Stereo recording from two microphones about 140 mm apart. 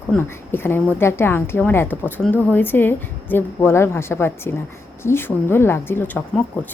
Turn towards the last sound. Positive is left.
turn(degrees=10)  # may be behind; listen again after turning